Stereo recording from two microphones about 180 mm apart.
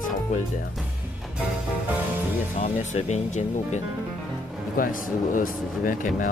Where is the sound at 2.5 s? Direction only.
40° left (ahead or behind).